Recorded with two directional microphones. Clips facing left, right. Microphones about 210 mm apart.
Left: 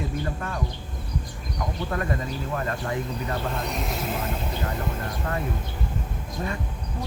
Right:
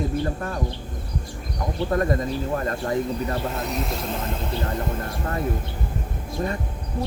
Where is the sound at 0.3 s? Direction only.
40° right (ahead or behind).